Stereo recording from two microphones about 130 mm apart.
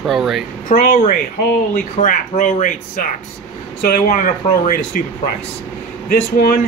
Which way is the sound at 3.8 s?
90° left.